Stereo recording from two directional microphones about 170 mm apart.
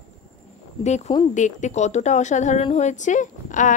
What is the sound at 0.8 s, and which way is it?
A woman's voice, 40° left (ahead or behind).